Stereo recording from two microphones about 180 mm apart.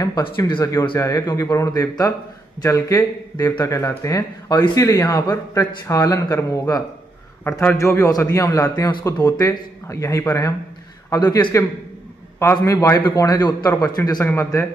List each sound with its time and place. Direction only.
0.0 s speech: 20° left (ahead or behind)